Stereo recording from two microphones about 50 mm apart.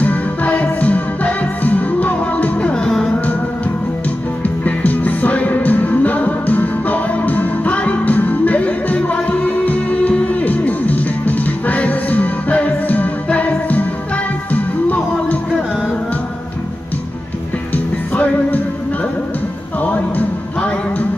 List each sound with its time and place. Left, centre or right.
0.0 s music: left
4.4 s music: left
18.1 s music: left
19.8 s music: left